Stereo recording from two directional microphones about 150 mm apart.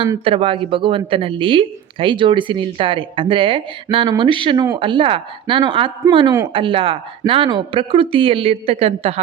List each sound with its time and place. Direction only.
0.3 s speech: 35° right (ahead or behind)